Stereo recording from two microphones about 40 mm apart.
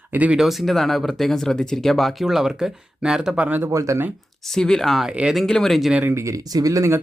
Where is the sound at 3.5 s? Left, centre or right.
Right.